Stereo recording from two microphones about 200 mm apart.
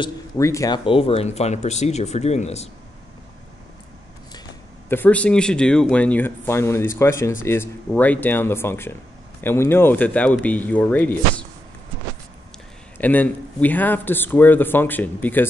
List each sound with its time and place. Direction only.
0.0 s speech: 15° left (ahead or behind)
0.8 s speech: 30° left (ahead or behind)
4.8 s speech: 10° left (ahead or behind)
12.9 s speech: 10° left (ahead or behind)